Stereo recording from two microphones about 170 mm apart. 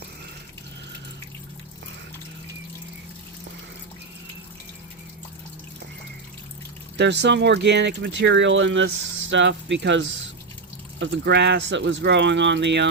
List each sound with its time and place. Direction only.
6.9 s speech: 90° right